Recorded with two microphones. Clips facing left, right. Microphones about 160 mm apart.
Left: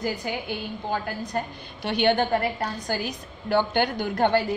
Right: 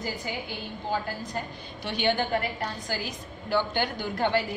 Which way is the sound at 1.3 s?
55° left (ahead or behind).